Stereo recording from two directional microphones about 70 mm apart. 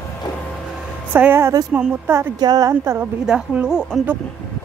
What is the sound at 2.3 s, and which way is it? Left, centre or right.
Speech, right.